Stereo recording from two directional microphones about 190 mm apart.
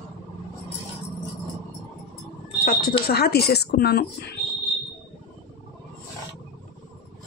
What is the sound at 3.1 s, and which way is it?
Speech, 55° left (ahead or behind).